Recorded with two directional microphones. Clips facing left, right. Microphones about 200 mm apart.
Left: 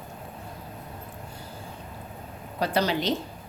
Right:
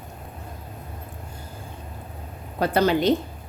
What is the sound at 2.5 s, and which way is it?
Speech, 55° right (ahead or behind).